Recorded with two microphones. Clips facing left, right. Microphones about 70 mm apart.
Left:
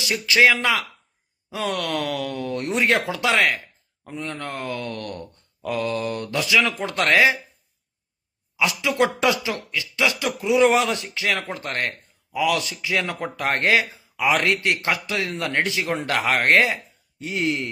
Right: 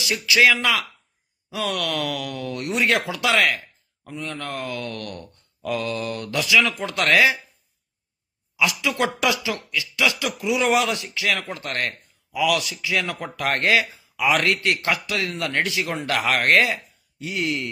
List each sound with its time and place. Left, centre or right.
0.0 s speech: left
8.5 s speech: left